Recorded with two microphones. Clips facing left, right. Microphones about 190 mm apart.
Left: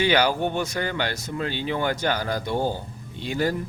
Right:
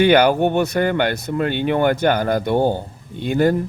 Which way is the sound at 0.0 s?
55° right (ahead or behind).